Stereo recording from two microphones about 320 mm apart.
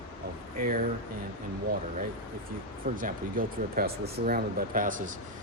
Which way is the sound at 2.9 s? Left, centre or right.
Right.